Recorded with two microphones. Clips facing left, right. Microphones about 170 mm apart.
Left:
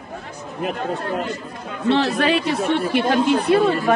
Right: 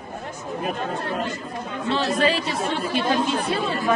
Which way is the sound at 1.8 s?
65° left (ahead or behind).